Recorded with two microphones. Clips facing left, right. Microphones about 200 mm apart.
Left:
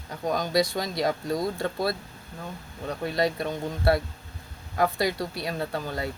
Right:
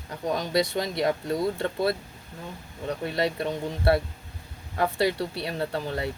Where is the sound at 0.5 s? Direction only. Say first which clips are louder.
Right 1 dB; 25° right (ahead or behind).